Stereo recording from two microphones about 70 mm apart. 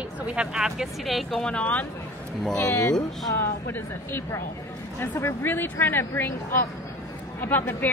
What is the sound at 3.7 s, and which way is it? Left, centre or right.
Speech, left.